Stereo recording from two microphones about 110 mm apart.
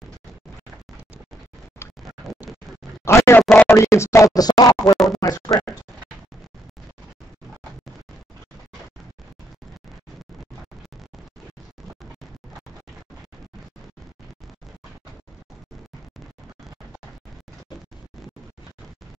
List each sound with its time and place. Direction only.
3.1 s scratch: 25° left (ahead or behind)
3.5 s music: 25° left (ahead or behind)
4.4 s scratch: 35° left (ahead or behind)
4.9 s speech: centre (ahead or behind)